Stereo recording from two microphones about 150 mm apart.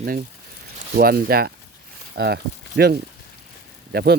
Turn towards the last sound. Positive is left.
turn(degrees=-90)